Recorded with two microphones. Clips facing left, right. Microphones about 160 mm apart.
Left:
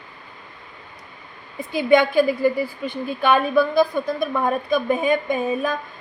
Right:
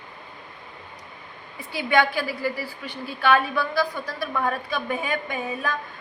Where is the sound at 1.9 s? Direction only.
20° left (ahead or behind).